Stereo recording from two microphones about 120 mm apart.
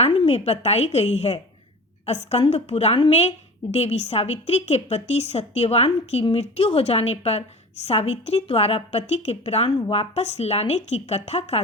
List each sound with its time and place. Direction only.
0.0 s a woman's voice: 55° left (ahead or behind)